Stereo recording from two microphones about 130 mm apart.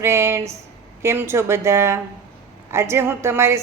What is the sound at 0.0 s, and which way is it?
Speech, 20° right (ahead or behind).